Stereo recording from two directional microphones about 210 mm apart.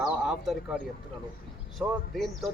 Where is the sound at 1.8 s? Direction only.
Centre (ahead or behind).